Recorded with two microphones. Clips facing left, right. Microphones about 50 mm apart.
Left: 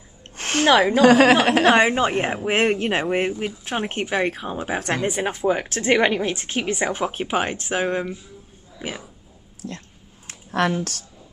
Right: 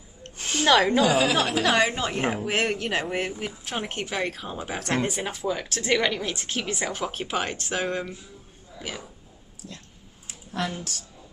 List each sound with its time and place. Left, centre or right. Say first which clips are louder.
0.4 s a sound: left 6 dB; left
0.7 s a woman's voice: left 3 dB; centre
1.0 s a woman's voice: left 8 dB; left
9.6 s speech: left 9 dB; left
10.2 s a sound: left 8 dB; left
10.8 s speech: left 8 dB; left